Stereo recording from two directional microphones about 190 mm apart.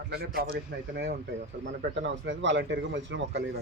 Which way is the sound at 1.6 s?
75° right (ahead or behind).